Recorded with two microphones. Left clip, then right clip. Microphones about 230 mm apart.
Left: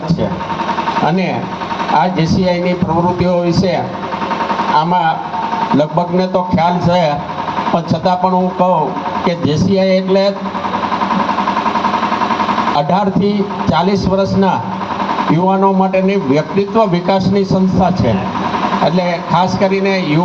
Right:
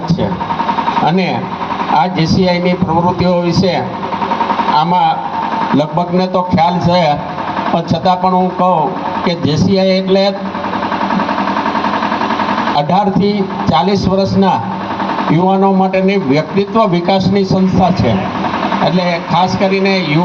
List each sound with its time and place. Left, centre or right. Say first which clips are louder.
2.0 s speech: right 1 dB; right
4.8 s speech: right 2 dB; right
12.9 s speech: right 2 dB; right